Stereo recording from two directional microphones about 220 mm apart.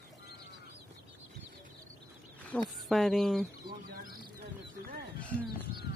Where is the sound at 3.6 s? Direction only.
40° right (ahead or behind).